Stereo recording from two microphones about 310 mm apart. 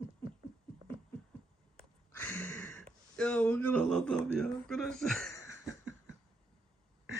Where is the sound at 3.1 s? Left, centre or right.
Centre.